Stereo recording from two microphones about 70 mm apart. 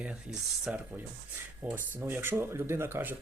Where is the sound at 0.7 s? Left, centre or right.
Centre.